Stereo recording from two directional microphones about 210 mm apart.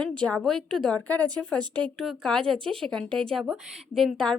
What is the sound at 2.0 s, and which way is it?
Speech, 5° left (ahead or behind).